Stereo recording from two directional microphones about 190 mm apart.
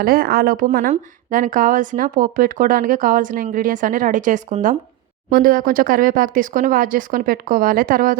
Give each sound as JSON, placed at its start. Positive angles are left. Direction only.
{"t": 0.0, "sound": "a woman's voice", "side_deg": -50}